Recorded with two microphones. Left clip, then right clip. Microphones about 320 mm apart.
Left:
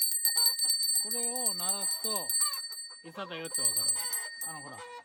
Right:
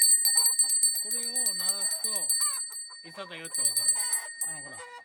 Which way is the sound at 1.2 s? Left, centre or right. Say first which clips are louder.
Right 2 dB; centre.